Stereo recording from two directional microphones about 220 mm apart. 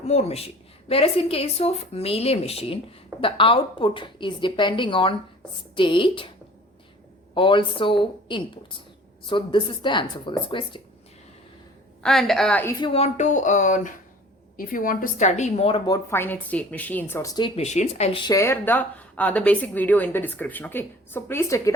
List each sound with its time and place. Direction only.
0.0 s a woman's voice: 30° left (ahead or behind)
7.3 s a woman's voice: 20° left (ahead or behind)
12.0 s a woman's voice: centre (ahead or behind)
12.8 s speech: 25° left (ahead or behind)
16.0 s a woman's voice: 10° left (ahead or behind); by 18.2 s 30° left (ahead or behind)
18.3 s a woman's voice: 10° left (ahead or behind)